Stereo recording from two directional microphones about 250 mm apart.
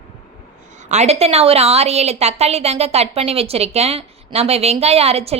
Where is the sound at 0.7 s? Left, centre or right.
Right.